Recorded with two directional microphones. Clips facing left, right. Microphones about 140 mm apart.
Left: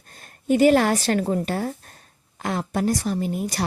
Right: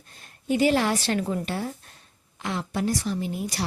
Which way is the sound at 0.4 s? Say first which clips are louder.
Left 5 dB; 50° left (ahead or behind).